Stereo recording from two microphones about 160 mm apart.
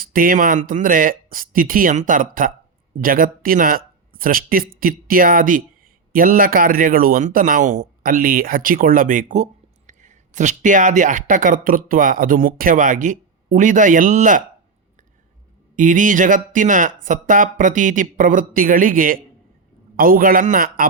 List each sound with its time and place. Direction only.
0.0 s speech: 60° right (ahead or behind)
15.7 s speech: 55° right (ahead or behind)